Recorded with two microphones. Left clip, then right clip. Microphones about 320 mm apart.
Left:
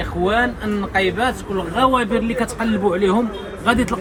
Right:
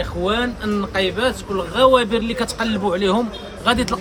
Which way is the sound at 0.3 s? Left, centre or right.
Centre.